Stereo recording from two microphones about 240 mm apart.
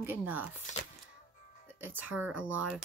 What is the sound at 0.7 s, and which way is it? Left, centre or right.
Speech, left.